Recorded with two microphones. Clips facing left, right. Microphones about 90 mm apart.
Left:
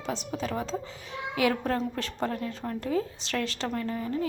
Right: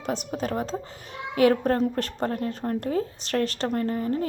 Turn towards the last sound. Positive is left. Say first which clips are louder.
# right 4 dB
turn(degrees=-45)  # may be behind; listen again after turning